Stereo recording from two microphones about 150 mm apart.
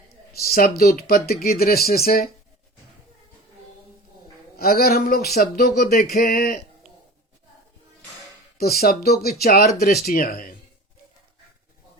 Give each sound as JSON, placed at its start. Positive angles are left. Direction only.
{"t": 0.3, "sound": "speech", "side_deg": 85}
{"t": 4.5, "sound": "speech", "side_deg": 90}
{"t": 8.8, "sound": "speech", "side_deg": 90}